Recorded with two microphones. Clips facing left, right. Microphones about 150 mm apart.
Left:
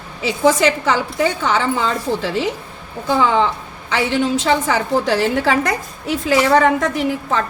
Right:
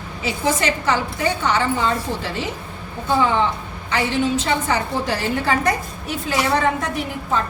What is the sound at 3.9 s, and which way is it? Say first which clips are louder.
A woman's voice: left 2 dB; 90° left.